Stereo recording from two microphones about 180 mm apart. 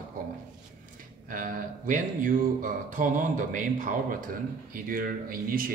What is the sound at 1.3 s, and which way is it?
Speech, 45° right (ahead or behind).